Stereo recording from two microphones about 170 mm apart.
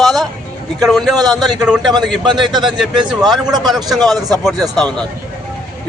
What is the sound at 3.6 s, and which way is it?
Speech, centre (ahead or behind).